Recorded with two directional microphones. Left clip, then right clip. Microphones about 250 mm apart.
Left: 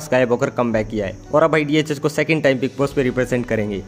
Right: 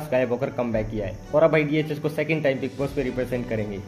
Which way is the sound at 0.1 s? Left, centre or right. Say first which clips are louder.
Left 6 dB; left.